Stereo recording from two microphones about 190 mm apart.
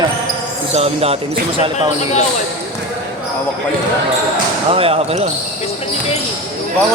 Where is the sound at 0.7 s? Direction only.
30° right (ahead or behind).